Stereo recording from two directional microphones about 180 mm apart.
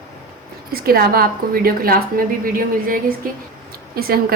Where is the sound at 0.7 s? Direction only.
55° right (ahead or behind).